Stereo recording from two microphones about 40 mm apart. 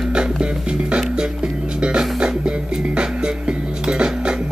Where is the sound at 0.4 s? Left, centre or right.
Right.